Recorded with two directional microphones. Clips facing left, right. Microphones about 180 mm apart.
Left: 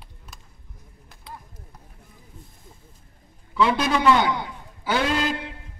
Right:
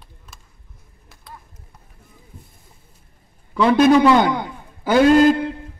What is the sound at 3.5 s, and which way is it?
A man's voice, 45° right (ahead or behind).